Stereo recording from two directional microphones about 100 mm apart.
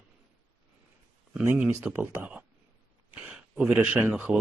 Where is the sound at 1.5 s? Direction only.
20° right (ahead or behind).